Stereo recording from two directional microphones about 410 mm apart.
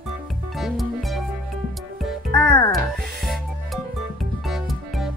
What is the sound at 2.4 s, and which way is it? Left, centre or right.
Music, centre.